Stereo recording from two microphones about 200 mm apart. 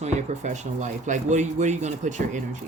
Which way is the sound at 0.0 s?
35° right (ahead or behind).